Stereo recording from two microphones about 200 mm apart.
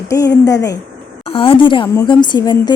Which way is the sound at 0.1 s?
15° left (ahead or behind).